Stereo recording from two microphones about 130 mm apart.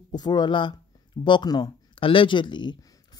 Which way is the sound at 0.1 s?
35° left (ahead or behind).